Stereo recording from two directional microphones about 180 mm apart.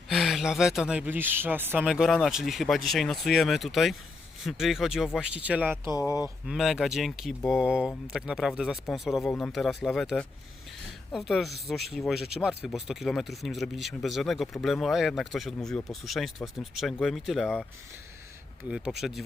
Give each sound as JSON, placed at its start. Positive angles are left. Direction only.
{"t": 0.1, "sound": "speech", "side_deg": 0}
{"t": 5.8, "sound": "speech", "side_deg": 20}
{"t": 6.4, "sound": "speech", "side_deg": 0}
{"t": 18.7, "sound": "speech", "side_deg": 0}